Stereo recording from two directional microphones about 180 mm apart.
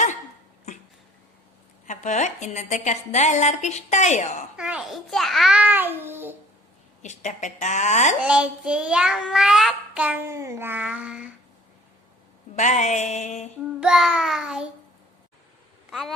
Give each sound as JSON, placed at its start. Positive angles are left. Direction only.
{"t": 1.9, "sound": "a woman's voice", "side_deg": 40}
{"t": 4.5, "sound": "child singing", "side_deg": -5}
{"t": 7.0, "sound": "a woman's voice", "side_deg": 40}
{"t": 8.2, "sound": "child singing", "side_deg": -5}
{"t": 12.5, "sound": "a woman's voice", "side_deg": 40}
{"t": 13.7, "sound": "child singing", "side_deg": -5}
{"t": 15.9, "sound": "speech", "side_deg": 0}